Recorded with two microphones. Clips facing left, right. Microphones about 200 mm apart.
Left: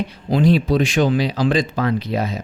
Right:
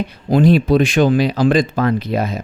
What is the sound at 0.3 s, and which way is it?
Speech, 50° right (ahead or behind).